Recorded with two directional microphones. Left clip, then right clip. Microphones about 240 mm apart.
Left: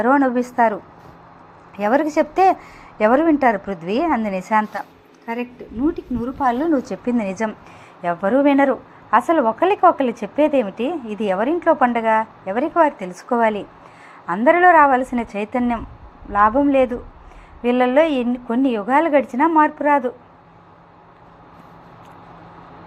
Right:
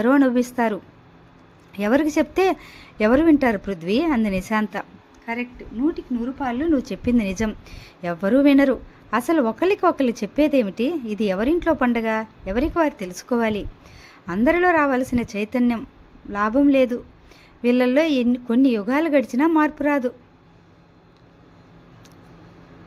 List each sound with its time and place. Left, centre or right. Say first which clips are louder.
0.0 s a woman's voice: left 2 dB; right
3.7 s a woman's voice: left 2 dB; right
5.2 s a woman's voice: left 2 dB; centre
6.7 s a woman's voice: left 2 dB; right
7.0 s a woman's voice: left 1 dB; right